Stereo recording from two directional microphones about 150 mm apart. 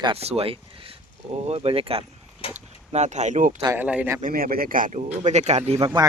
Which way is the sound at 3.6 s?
15° right (ahead or behind).